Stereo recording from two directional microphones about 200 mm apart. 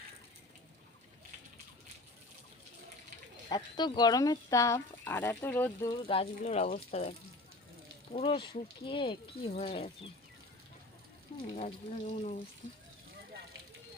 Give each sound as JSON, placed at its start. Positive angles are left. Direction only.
{"t": 3.5, "sound": "speech", "side_deg": 20}
{"t": 6.0, "sound": "speech", "side_deg": 30}
{"t": 11.5, "sound": "speech", "side_deg": 35}